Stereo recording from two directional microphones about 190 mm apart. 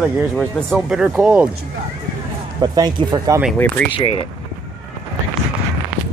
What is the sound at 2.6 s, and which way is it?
Speech, 20° right (ahead or behind).